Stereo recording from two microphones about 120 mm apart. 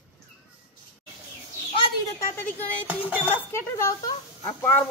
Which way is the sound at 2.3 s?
15° left (ahead or behind).